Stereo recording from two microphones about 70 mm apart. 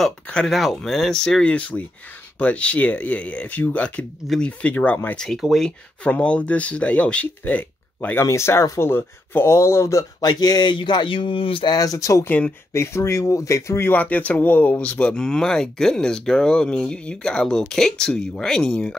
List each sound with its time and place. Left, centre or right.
0.5 s speech: centre; by 5.1 s left
5.1 s speech: centre; by 8.2 s left
8.2 s speech: left
10.2 s speech: left
11.6 s speech: left
12.3 s speech: left
12.7 s speech: left
13.9 s speech: left